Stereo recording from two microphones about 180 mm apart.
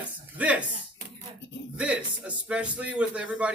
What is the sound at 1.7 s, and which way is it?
Speech, 5° right (ahead or behind).